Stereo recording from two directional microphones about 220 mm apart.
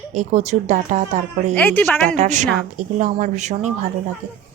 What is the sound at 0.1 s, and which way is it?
Speech, 30° right (ahead or behind).